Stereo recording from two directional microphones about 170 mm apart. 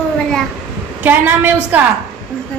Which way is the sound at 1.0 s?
10° right (ahead or behind).